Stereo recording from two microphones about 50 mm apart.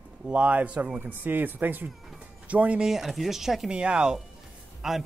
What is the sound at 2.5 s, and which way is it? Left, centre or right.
Speech, right.